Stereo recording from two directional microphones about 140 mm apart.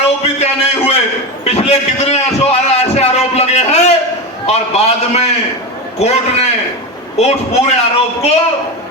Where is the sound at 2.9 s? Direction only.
50° left (ahead or behind).